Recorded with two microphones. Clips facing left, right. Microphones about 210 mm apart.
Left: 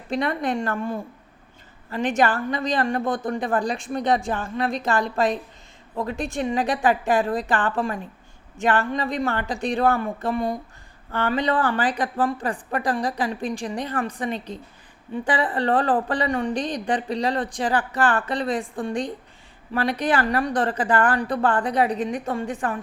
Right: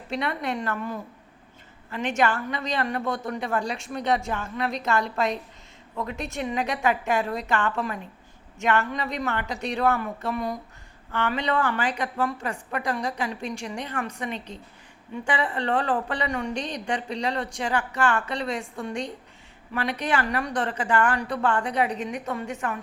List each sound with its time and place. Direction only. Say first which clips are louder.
0.1 s a woman's voice: left 4 dB; 35° left (ahead or behind)